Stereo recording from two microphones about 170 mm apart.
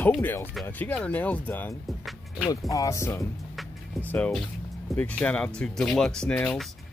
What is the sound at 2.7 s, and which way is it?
Speech, 20° left (ahead or behind).